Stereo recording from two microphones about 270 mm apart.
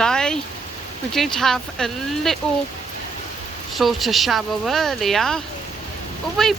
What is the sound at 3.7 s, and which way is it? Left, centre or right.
Speech, centre.